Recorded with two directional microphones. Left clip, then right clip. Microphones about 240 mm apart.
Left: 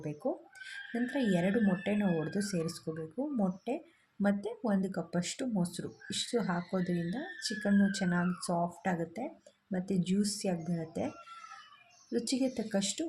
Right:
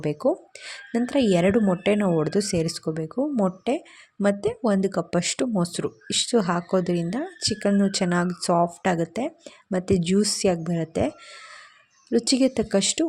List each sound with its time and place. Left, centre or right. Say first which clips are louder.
0.6 s speech: right 9 dB; right
12.1 s speech: right 12 dB; right